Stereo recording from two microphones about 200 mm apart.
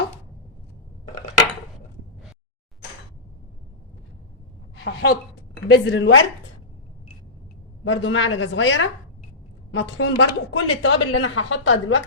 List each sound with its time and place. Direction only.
4.7 s a sound: 55° left (ahead or behind)
5.6 s a woman's voice: 55° left (ahead or behind); by 6.2 s 70° left (ahead or behind)
7.9 s a woman's voice: 70° left (ahead or behind)